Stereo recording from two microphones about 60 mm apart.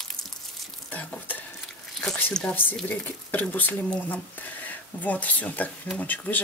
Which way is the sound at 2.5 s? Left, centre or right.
Left.